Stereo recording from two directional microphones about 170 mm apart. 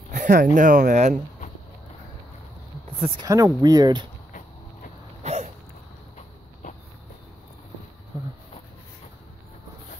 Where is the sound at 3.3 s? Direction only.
20° right (ahead or behind).